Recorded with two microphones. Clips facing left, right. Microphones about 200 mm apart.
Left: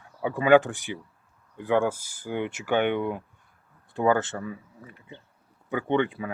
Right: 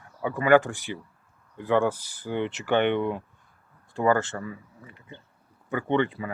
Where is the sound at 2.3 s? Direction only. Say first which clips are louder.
Right 1 dB; 10° left (ahead or behind).